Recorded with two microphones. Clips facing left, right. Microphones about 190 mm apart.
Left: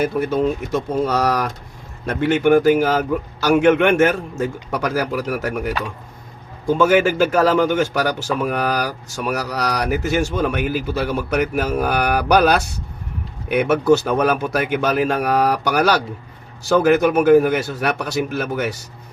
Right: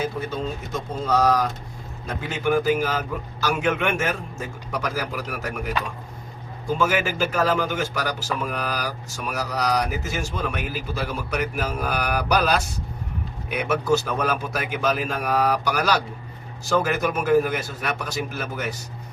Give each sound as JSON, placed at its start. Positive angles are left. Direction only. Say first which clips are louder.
{"t": 0.0, "sound": "speech", "louder": "left 9 dB", "side_deg": 70}
{"t": 6.8, "sound": "speech", "louder": "left 9 dB", "side_deg": 55}